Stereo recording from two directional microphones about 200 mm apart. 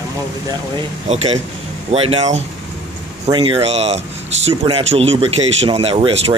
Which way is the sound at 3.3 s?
25° right (ahead or behind).